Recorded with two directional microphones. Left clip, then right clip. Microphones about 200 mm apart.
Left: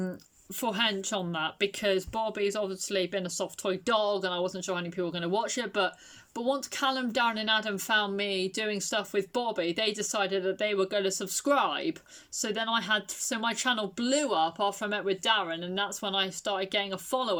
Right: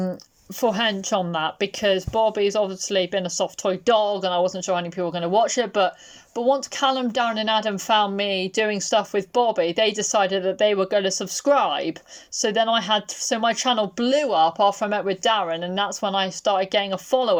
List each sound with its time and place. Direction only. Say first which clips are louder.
0.6 s speech: right 7 dB; 20° left (ahead or behind)